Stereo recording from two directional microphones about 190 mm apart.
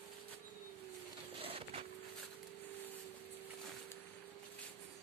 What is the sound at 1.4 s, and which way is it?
Printer, 30° right (ahead or behind).